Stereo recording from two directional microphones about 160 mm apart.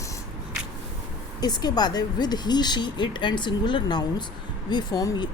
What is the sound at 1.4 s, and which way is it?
Speech, 25° left (ahead or behind).